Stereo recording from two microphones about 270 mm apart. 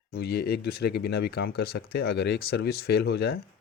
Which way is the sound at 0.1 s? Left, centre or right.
Left.